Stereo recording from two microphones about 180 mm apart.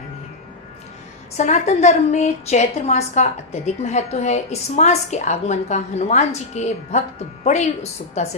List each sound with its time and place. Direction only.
1.4 s a woman's voice: 40° left (ahead or behind)